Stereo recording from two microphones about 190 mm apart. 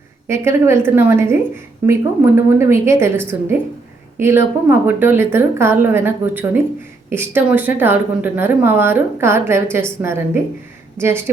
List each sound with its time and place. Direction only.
0.3 s a woman's voice: 15° right (ahead or behind)